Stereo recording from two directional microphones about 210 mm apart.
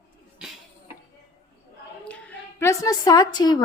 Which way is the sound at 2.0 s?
5° left (ahead or behind).